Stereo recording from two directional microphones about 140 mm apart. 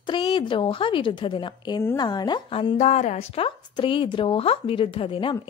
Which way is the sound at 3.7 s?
35° left (ahead or behind).